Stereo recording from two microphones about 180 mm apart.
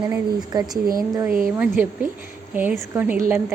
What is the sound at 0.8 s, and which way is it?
Speech, 50° right (ahead or behind).